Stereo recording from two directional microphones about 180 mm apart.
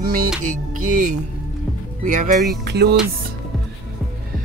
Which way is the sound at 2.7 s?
65° right (ahead or behind).